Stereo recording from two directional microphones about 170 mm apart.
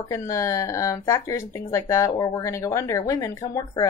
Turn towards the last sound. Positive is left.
turn(degrees=20)  # may be behind; listen again after turning